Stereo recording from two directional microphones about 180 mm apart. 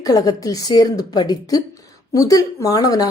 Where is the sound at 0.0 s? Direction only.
20° left (ahead or behind).